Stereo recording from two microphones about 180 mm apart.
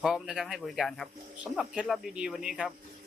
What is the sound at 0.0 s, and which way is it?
Speech, centre (ahead or behind).